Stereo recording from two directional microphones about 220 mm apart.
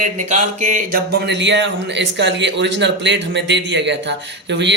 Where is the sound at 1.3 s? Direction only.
55° right (ahead or behind).